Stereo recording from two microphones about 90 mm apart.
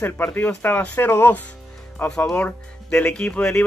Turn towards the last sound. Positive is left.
turn(degrees=10)  # may be behind; listen again after turning